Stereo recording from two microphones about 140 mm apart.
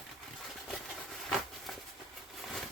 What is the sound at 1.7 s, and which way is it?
Train, centre (ahead or behind).